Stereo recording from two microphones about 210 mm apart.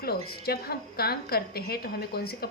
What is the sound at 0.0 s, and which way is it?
A woman's voice, 45° left (ahead or behind).